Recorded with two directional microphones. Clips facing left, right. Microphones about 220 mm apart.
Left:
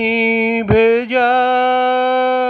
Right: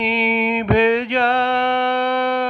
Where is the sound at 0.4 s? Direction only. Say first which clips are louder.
Left 5 dB; 40° left (ahead or behind).